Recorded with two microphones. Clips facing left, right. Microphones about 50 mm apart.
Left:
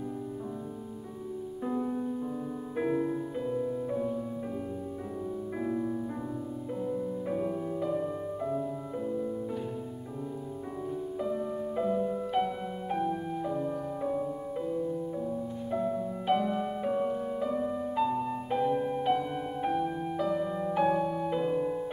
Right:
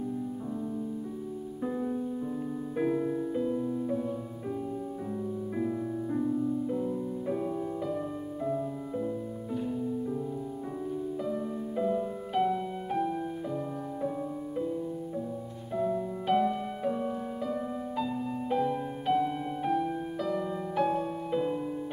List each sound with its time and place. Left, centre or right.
1.6 s music: centre
5.6 s music: centre
11.2 s music: centre